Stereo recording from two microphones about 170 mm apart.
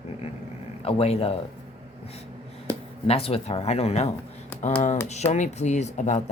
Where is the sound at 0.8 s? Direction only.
35° left (ahead or behind).